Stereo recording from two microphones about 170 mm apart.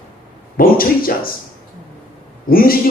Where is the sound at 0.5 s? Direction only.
60° left (ahead or behind).